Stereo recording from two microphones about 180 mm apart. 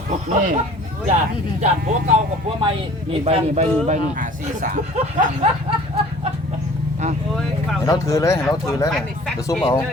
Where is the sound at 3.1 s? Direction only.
35° right (ahead or behind).